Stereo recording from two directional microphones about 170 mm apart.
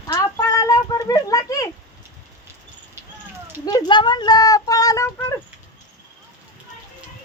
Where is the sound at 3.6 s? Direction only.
25° left (ahead or behind).